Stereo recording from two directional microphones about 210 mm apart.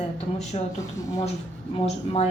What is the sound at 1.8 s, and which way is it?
Speech, 30° left (ahead or behind).